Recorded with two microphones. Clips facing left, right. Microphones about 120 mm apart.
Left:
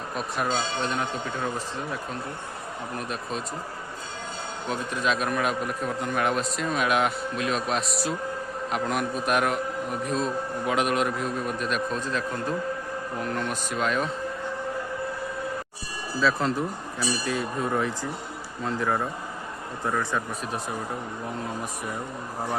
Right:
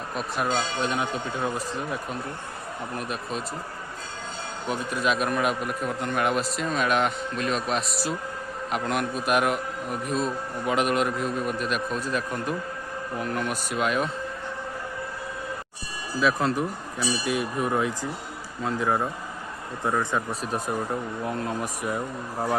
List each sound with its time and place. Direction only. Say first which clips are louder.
0.2 s a man's voice: right 1 dB; centre (ahead or behind)
0.8 s a man's voice: right 1 dB; 10° right (ahead or behind)
4.7 s a man's voice: right 1 dB; 5° right (ahead or behind)
16.2 s a man's voice: right 1 dB; 15° right (ahead or behind)